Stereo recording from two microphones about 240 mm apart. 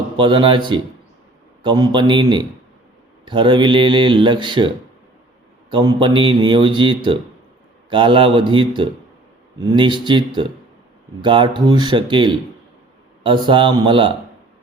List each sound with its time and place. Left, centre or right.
0.2 s speech: right
5.7 s speech: centre